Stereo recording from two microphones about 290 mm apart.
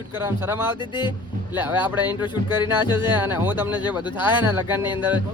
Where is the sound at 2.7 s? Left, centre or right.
Centre.